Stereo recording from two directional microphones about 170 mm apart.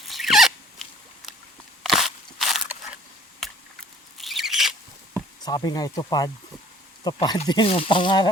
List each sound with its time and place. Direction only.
0.0 s a sound: centre (ahead or behind)
1.8 s crunch: centre (ahead or behind)
4.2 s owl: centre (ahead or behind)
5.4 s speech: 25° left (ahead or behind)